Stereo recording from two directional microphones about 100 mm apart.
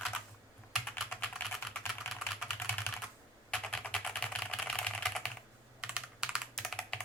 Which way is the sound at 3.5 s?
10° left (ahead or behind).